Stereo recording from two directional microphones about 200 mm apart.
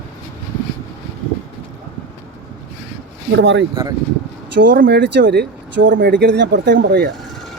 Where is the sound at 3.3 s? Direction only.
65° right (ahead or behind).